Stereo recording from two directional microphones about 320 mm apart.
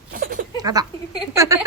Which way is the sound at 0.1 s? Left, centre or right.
Right.